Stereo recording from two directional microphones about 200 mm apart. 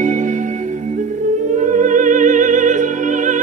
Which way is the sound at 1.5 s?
40° right (ahead or behind).